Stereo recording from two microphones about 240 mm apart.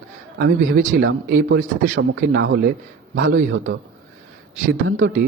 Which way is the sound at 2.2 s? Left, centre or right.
Right.